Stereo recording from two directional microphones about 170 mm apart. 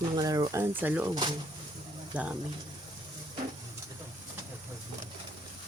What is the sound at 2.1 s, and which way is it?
Speech, 10° right (ahead or behind).